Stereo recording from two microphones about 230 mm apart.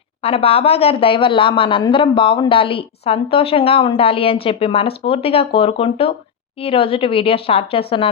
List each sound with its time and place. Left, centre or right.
0.2 s speech: left